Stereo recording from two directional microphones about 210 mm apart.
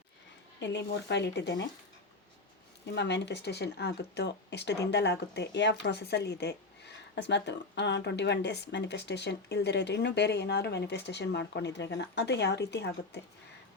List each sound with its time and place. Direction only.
0.6 s speech: 55° left (ahead or behind)
2.9 s speech: 55° left (ahead or behind)